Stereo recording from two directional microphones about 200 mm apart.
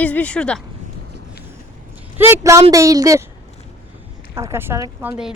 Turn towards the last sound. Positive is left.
turn(degrees=-10)  # may be behind; listen again after turning